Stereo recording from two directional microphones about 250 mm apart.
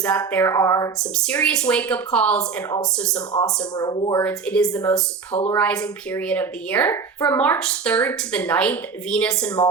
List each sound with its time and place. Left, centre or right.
0.0 s speech: centre
3.6 s speech: centre
4.2 s speech: centre